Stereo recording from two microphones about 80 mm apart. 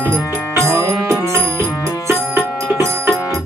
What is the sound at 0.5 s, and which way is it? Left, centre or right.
Music, right.